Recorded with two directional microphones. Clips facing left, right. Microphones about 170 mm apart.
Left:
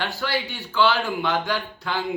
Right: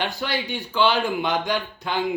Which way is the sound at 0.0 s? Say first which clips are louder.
Even; 20° right (ahead or behind).